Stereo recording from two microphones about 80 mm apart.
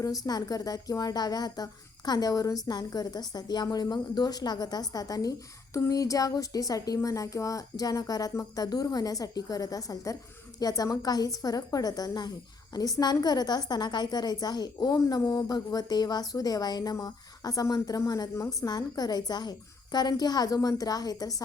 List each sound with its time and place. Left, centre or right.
0.3 s a woman's voice: left
14.9 s a woman's voice: left